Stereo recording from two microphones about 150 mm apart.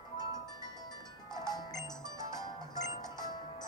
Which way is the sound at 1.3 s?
25° left (ahead or behind).